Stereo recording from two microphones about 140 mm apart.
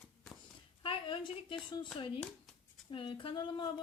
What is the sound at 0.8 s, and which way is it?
Speech, 40° left (ahead or behind).